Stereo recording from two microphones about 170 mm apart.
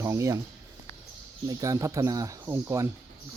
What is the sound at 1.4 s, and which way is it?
Speech, 20° right (ahead or behind).